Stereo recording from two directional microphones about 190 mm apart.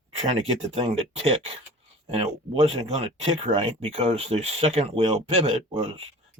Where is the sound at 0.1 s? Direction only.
35° right (ahead or behind).